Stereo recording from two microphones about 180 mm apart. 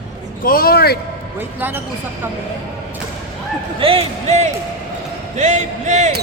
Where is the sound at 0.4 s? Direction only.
55° left (ahead or behind).